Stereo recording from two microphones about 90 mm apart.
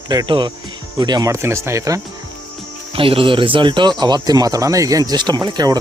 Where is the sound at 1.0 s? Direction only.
45° right (ahead or behind).